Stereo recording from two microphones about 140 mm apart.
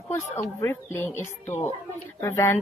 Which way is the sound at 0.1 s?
20° left (ahead or behind).